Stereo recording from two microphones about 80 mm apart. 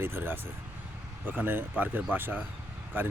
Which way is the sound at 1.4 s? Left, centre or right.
Right.